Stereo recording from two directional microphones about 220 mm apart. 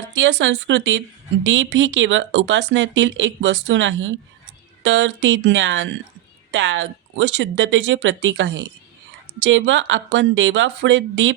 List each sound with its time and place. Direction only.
0.1 s speech: 55° right (ahead or behind)